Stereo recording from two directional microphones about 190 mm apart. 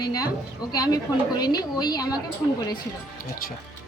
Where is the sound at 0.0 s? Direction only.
20° left (ahead or behind).